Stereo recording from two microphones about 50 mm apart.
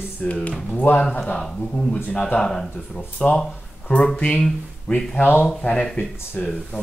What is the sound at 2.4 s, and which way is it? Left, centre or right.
Speech, centre.